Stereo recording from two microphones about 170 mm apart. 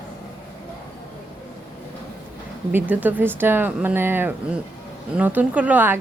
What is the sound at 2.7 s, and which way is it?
Speech, 10° right (ahead or behind).